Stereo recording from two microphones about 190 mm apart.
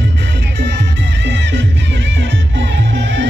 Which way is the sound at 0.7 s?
70° right (ahead or behind).